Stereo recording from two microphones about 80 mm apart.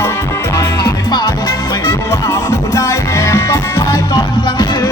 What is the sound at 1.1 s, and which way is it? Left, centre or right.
Music, left.